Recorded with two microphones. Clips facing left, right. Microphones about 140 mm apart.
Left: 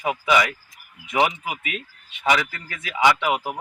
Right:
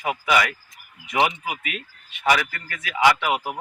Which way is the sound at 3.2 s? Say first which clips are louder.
Left 1 dB; 20° left (ahead or behind).